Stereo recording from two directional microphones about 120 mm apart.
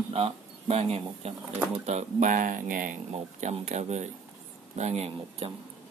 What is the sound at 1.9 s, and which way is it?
Speech, 80° right.